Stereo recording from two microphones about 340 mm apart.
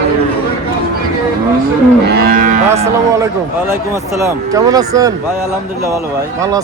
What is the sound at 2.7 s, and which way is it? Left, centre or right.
A man's voice, centre.